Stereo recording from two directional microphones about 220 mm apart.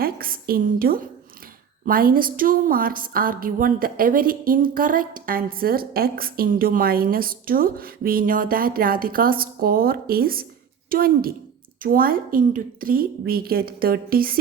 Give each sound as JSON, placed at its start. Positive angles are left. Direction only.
{"t": 0.0, "sound": "a woman's voice", "side_deg": -40}